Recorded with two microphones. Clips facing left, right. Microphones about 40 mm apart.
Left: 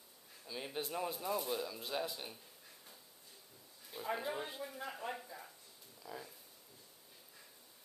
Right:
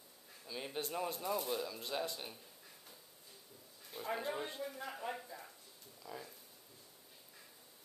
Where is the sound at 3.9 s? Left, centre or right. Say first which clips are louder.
Even; centre.